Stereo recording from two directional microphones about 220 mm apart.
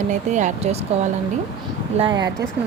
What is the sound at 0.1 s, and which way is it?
Speech, 35° right (ahead or behind).